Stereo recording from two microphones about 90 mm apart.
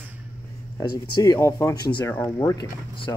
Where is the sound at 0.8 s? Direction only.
40° left (ahead or behind).